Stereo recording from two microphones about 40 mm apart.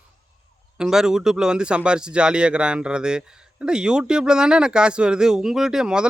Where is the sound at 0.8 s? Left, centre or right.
Centre.